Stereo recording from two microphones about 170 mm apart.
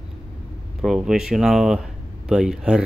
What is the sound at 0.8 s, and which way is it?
Speech, 5° right (ahead or behind).